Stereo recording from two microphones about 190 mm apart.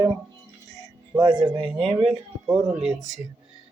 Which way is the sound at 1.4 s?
25° right (ahead or behind).